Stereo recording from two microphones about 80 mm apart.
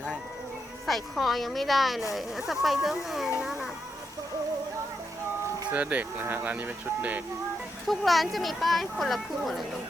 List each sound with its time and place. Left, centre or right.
0.9 s speech: centre
3.2 s a sound: centre
5.7 s speech: centre
7.9 s speech: centre